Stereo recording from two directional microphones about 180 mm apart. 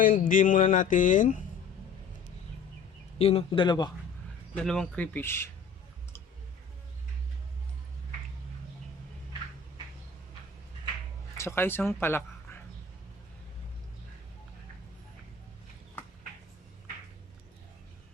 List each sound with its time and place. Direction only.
0.0 s speech: 50° left (ahead or behind)
3.2 s speech: 35° left (ahead or behind)
4.5 s speech: 5° left (ahead or behind)
11.3 s speech: 15° left (ahead or behind)